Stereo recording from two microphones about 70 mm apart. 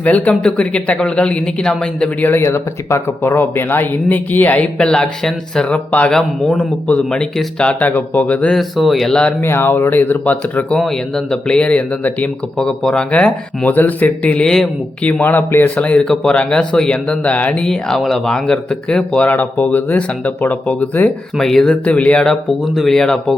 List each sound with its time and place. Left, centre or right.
0.0 s speech: left
2.2 s speech: left
2.5 s speech: left
3.2 s speech: left; by 7.9 s centre
7.9 s speech: left
8.5 s speech: centre
9.4 s speech: left
10.8 s speech: centre
15.0 s speech: left
19.3 s speech: left
21.3 s speech: centre
21.7 s speech: centre